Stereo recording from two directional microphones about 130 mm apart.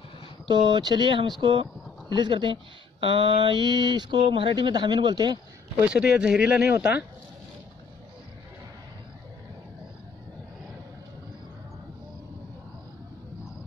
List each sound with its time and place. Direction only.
0.5 s speech: 35° right (ahead or behind)
5.9 s speech: 10° right (ahead or behind)